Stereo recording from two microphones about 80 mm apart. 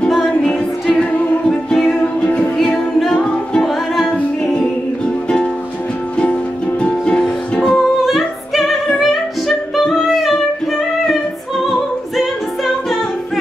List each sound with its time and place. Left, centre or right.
0.3 s music: centre
2.5 s music: centre
3.6 s music: centre
4.1 s music: centre
6.8 s music: centre
7.7 s music: centre
9.8 s singing: centre
11.6 s music: centre